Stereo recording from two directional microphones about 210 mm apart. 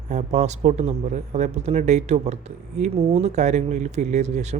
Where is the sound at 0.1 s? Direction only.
35° right (ahead or behind).